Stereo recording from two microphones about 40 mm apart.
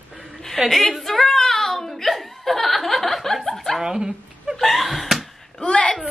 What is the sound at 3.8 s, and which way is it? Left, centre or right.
Speech, centre.